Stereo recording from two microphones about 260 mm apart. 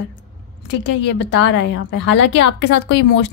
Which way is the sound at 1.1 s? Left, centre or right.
Left.